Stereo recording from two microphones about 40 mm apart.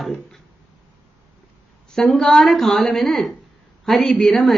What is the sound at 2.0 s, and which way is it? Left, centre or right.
A woman's voice, centre.